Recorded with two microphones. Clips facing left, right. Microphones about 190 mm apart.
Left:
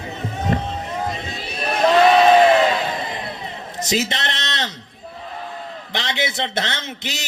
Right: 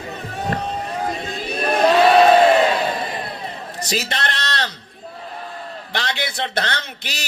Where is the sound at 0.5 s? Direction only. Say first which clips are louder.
Left 3 dB; 20° left (ahead or behind).